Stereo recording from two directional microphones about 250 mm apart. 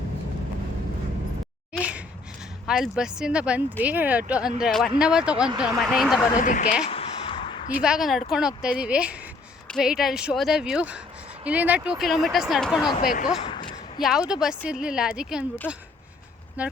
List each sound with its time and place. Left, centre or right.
1.7 s a sound: centre
2.6 s a woman's voice: centre
6.3 s speech: left
6.9 s a sound: left
7.8 s a woman's voice: centre
13.0 s speech: left
13.4 s a sound: centre
14.0 s a woman's voice: centre
16.6 s a woman's voice: centre